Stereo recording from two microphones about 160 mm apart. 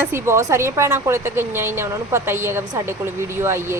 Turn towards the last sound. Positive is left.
turn(degrees=-15)  # may be behind; listen again after turning